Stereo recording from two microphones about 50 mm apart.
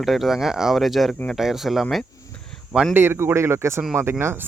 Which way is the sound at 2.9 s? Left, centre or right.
Right.